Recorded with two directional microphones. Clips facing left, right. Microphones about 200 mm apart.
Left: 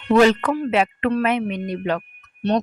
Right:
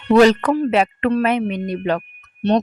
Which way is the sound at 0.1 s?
35° right (ahead or behind).